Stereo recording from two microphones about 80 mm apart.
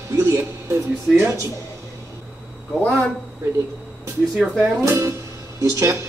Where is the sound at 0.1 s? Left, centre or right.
Right.